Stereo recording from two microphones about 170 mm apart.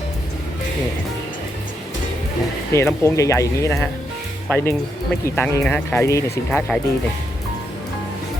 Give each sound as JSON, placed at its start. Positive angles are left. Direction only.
{"t": 2.7, "sound": "speech", "side_deg": 15}
{"t": 6.5, "sound": "speech", "side_deg": 5}